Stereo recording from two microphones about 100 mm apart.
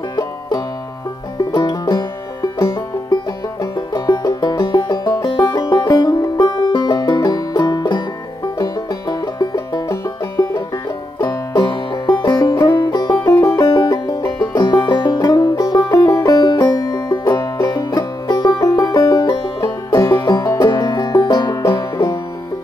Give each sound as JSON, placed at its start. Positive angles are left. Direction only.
{"t": 0.1, "sound": "banjo", "side_deg": 45}
{"t": 1.5, "sound": "music", "side_deg": 45}
{"t": 9.4, "sound": "music", "side_deg": 40}